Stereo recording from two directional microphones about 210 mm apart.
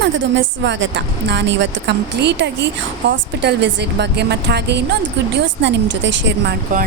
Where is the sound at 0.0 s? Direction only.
60° right (ahead or behind).